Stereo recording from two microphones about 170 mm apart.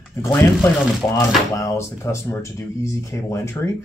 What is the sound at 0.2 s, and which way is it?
Speech, 10° left (ahead or behind).